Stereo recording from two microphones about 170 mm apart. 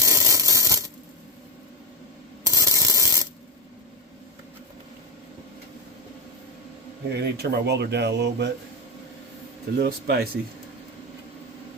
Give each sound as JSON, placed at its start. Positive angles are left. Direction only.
{"t": 0.0, "sound": "a sound", "side_deg": -20}
{"t": 2.4, "sound": "ratchet", "side_deg": -20}
{"t": 7.1, "sound": "speech", "side_deg": -75}
{"t": 9.7, "sound": "speech", "side_deg": -70}